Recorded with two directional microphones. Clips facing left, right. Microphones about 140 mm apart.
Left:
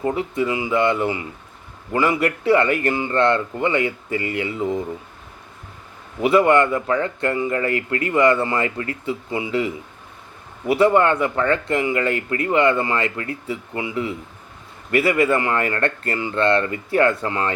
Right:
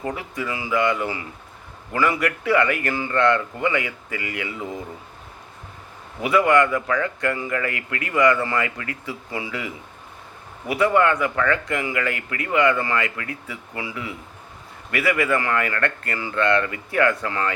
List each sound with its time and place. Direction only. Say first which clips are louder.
0.0 s speech: left 7 dB; 25° left (ahead or behind)
6.2 s speech: left 3 dB; 30° left (ahead or behind)